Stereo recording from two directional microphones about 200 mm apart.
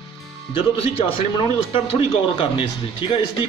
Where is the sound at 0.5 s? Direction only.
25° left (ahead or behind).